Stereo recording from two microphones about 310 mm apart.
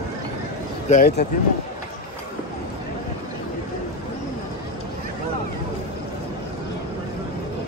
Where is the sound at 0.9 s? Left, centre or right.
Left.